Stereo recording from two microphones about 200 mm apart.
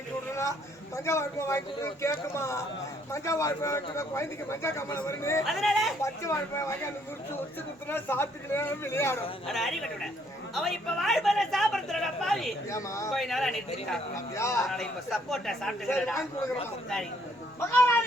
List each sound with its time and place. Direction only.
0.9 s a man's voice: 15° left (ahead or behind)
5.5 s speech: centre (ahead or behind)
6.0 s a man's voice: 15° left (ahead or behind)
9.5 s speech: centre (ahead or behind)
12.7 s a man's voice: 15° left (ahead or behind)
13.1 s speech: centre (ahead or behind)
14.3 s a man's voice: 15° left (ahead or behind)
14.6 s speech: centre (ahead or behind)
17.6 s a man's voice: 10° left (ahead or behind)